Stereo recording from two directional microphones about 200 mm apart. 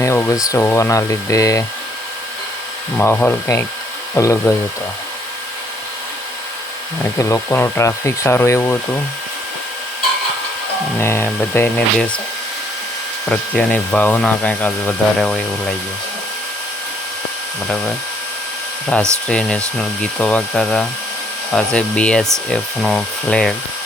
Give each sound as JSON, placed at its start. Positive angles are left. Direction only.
{"t": 0.0, "sound": "tools", "side_deg": 15}
{"t": 0.4, "sound": "speech", "side_deg": 15}
{"t": 3.0, "sound": "speech", "side_deg": 10}
{"t": 7.2, "sound": "speech", "side_deg": 15}
{"t": 10.9, "sound": "speech", "side_deg": 10}
{"t": 13.3, "sound": "speech", "side_deg": 5}
{"t": 18.9, "sound": "speech", "side_deg": 5}